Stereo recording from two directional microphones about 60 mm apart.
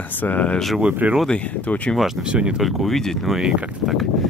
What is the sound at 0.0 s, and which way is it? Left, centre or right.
Speech, left.